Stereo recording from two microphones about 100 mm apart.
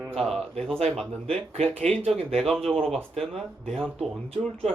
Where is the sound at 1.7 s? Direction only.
75° right (ahead or behind).